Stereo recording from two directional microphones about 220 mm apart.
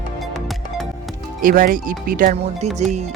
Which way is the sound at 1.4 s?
40° right (ahead or behind).